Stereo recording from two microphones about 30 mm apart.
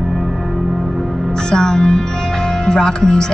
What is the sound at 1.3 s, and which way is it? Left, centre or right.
Speech, left.